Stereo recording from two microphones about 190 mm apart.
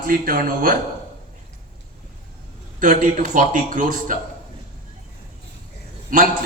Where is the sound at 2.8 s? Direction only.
45° right (ahead or behind).